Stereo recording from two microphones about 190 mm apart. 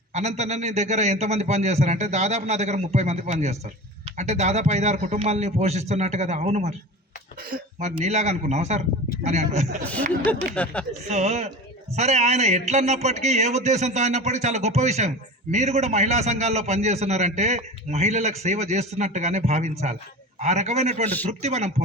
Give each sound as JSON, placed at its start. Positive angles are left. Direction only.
{"t": 0.1, "sound": "a man's voice", "side_deg": -35}
{"t": 10.5, "sound": "speech", "side_deg": 5}
{"t": 11.1, "sound": "a man's voice", "side_deg": -35}